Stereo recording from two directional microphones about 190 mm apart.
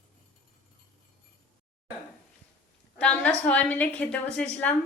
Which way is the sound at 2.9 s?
5° left (ahead or behind).